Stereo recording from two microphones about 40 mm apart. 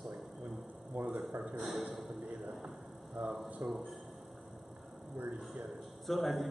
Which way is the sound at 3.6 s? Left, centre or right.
Right.